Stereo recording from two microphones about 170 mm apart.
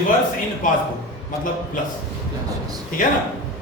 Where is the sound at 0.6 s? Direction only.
50° left (ahead or behind).